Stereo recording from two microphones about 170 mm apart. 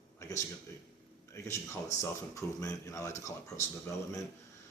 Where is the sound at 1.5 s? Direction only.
15° left (ahead or behind).